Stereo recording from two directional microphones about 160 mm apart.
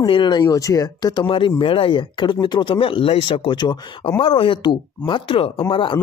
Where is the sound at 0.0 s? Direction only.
30° left (ahead or behind).